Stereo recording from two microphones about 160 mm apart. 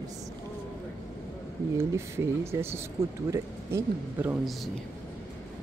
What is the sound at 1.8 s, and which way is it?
Speech, 15° right (ahead or behind).